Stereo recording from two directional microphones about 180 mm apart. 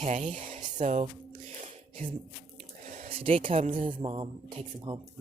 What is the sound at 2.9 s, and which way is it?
Speech, 30° right (ahead or behind).